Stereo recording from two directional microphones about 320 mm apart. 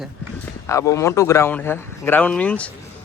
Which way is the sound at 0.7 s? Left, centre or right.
Centre.